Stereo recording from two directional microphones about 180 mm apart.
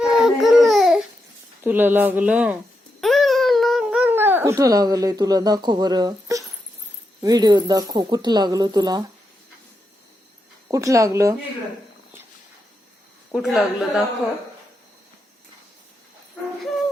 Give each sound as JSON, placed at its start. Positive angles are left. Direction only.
{"t": 0.0, "sound": "baby cry", "side_deg": 0}
{"t": 1.6, "sound": "speech", "side_deg": -10}
{"t": 3.0, "sound": "a sound", "side_deg": 0}
{"t": 7.2, "sound": "speech", "side_deg": -20}
{"t": 10.7, "sound": "speech", "side_deg": -20}
{"t": 13.3, "sound": "speech", "side_deg": -5}